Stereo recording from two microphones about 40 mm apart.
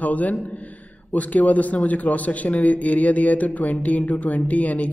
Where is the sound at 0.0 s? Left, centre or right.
Left.